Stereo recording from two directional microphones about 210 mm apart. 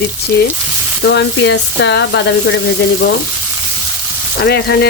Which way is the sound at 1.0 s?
55° left (ahead or behind).